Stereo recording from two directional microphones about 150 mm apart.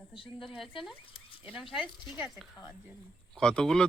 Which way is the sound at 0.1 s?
35° left (ahead or behind).